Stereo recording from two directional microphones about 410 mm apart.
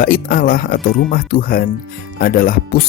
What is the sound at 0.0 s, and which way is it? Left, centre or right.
Speech, left.